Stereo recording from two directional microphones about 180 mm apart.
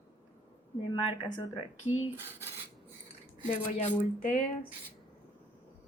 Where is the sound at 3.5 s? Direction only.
45° left (ahead or behind).